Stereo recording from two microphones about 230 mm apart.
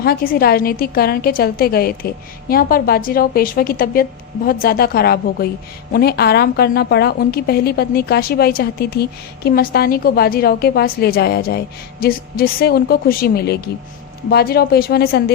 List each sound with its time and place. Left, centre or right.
0.0 s a woman's voice: left